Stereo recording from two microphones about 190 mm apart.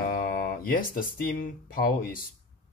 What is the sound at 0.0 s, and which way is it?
Speech, 45° left (ahead or behind).